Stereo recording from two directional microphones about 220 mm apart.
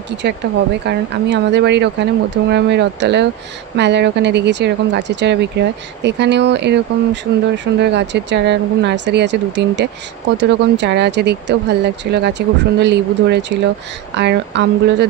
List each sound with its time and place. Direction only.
0.8 s speech: 50° right (ahead or behind)